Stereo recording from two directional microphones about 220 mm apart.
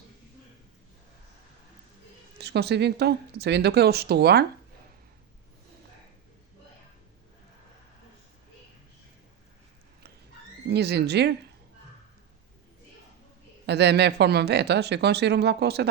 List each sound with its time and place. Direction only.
2.4 s speech: 50° right (ahead or behind)
10.7 s speech: 50° right (ahead or behind)
13.7 s speech: 50° right (ahead or behind)